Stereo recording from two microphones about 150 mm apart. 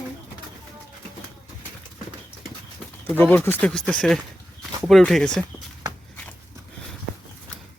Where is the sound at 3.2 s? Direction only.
10° left (ahead or behind).